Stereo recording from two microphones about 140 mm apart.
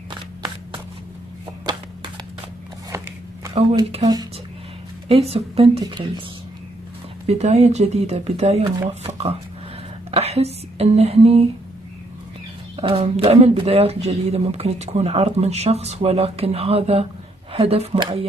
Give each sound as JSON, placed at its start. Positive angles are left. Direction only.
{"t": 3.6, "sound": "speech", "side_deg": -40}
{"t": 5.0, "sound": "speech", "side_deg": -45}
{"t": 7.2, "sound": "a woman's voice", "side_deg": -50}
{"t": 12.7, "sound": "speech", "side_deg": -40}